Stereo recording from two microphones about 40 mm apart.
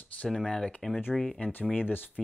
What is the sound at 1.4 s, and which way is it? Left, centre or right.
Speech, left.